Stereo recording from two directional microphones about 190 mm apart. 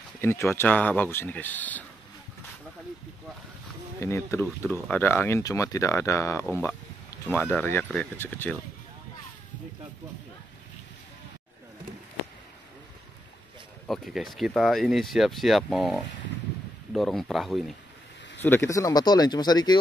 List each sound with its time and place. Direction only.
0.2 s speech: 10° left (ahead or behind)
4.0 s speech: 15° left (ahead or behind)
13.8 s speech: centre (ahead or behind)
18.4 s speech: 10° left (ahead or behind)